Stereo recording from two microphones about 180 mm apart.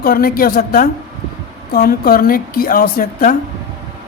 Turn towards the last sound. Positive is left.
turn(degrees=50)  # may be behind; listen again after turning